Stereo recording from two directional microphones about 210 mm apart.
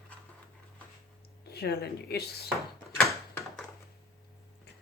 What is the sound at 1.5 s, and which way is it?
Speech, 50° left (ahead or behind).